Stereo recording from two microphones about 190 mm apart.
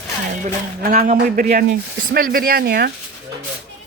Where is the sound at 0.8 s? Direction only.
45° right (ahead or behind).